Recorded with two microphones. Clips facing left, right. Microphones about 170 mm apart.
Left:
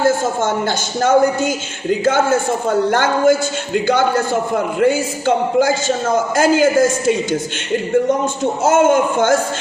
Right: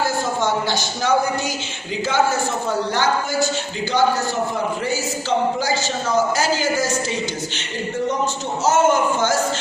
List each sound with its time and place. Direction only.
1.0 s a man's voice: 50° left (ahead or behind)
8.6 s a man's voice: 55° left (ahead or behind)